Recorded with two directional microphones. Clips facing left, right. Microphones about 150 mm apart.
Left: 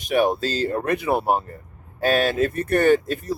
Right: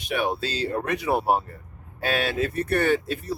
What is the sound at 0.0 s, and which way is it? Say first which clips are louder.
Speech: left 6 dB; 45° left (ahead or behind).